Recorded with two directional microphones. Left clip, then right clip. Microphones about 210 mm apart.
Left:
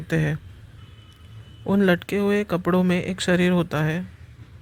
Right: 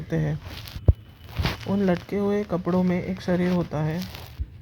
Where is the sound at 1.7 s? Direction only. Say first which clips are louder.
Left 6 dB; 50° left (ahead or behind).